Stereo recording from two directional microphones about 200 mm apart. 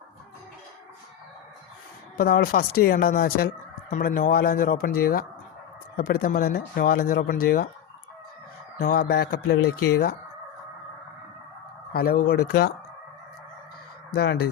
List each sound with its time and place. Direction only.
2.1 s speech: 50° left (ahead or behind)
8.8 s speech: 50° left (ahead or behind)
11.9 s speech: 50° left (ahead or behind)
14.1 s speech: 55° left (ahead or behind)